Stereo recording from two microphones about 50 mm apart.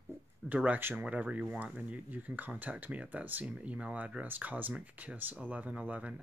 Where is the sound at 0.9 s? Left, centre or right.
Right.